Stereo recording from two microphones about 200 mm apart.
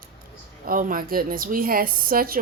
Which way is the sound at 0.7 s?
45° right (ahead or behind).